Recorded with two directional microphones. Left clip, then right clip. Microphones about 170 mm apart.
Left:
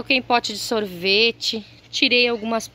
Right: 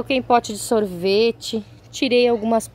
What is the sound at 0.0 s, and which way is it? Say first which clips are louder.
A woman's voice: right 1 dB; 15° right (ahead or behind).